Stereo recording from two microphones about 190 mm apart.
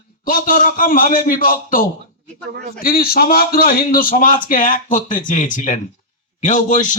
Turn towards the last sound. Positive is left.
turn(degrees=40)  # may be behind; listen again after turning